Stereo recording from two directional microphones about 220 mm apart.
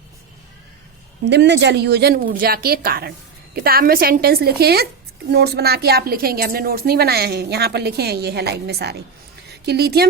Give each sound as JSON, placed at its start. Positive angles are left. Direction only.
{"t": 1.2, "sound": "a woman's voice", "side_deg": -50}